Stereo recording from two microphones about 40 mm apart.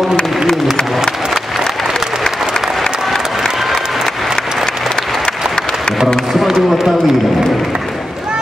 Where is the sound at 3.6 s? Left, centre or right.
Centre.